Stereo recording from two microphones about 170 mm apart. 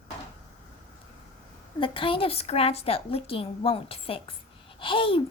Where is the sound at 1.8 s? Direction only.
30° left (ahead or behind).